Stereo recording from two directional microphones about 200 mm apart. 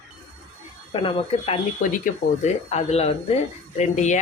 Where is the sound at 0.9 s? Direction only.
25° left (ahead or behind).